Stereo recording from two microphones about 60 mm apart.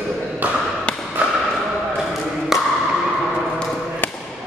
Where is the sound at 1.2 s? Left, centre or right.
Right.